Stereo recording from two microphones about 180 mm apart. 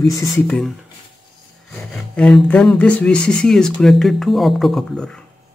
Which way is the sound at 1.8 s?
5° left (ahead or behind).